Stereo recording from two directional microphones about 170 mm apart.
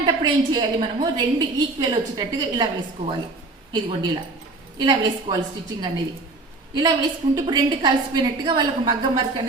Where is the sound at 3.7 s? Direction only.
25° right (ahead or behind).